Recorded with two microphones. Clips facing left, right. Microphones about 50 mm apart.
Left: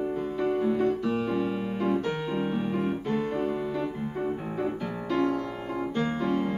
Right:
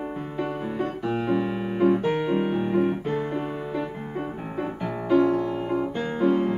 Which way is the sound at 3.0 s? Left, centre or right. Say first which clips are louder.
Right 1 dB; centre.